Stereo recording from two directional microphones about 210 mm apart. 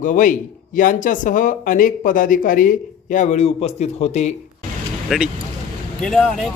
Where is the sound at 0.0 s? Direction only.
40° left (ahead or behind).